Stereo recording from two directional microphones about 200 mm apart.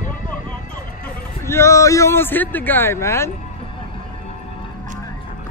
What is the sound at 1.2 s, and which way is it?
Speech, 15° left (ahead or behind).